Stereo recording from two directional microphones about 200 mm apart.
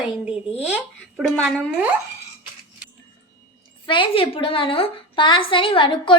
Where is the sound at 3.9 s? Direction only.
25° left (ahead or behind).